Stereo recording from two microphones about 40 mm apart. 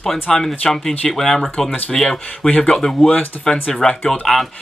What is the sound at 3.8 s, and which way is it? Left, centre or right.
Speech, left.